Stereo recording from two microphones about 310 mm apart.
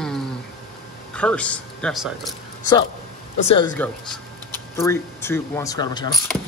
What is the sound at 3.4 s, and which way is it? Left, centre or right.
Speech, centre.